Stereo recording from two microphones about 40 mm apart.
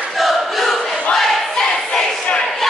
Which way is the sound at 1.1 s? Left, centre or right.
Centre.